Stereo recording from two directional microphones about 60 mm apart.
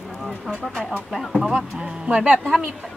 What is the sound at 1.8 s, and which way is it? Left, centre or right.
Speech, centre.